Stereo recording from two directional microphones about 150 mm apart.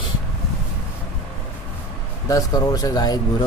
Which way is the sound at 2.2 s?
25° left (ahead or behind).